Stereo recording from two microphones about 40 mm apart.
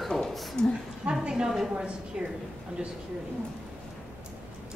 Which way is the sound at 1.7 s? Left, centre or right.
Right.